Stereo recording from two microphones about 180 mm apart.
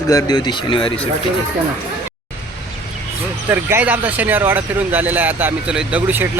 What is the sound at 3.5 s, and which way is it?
Speech, 10° right (ahead or behind).